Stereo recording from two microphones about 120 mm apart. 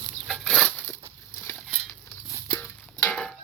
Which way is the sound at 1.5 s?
5° left (ahead or behind).